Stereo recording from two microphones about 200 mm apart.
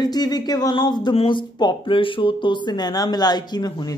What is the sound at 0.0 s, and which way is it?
Speech, 20° left (ahead or behind).